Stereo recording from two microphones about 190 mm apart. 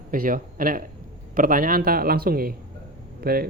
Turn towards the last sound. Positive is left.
turn(degrees=-55)  # may be behind; listen again after turning